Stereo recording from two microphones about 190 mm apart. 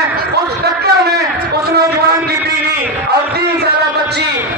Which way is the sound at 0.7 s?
55° right (ahead or behind).